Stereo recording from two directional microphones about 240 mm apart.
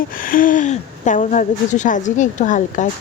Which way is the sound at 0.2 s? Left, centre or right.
Left.